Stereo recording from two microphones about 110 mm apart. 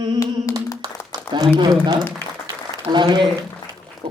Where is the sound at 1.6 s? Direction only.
40° right (ahead or behind).